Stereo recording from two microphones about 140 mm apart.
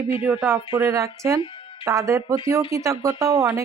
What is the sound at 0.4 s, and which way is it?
Speech, 15° right (ahead or behind).